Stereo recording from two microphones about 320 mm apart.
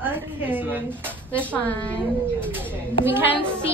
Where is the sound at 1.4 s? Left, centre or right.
Centre.